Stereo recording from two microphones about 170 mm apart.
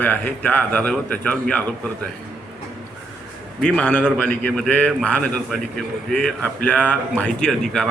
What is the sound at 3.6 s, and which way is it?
Speech, 5° left (ahead or behind).